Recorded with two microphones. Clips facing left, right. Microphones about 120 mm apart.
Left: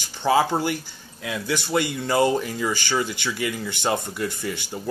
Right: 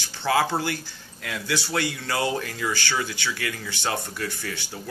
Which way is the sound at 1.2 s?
5° left (ahead or behind).